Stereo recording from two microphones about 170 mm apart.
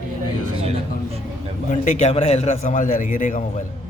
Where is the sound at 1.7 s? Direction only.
45° left (ahead or behind).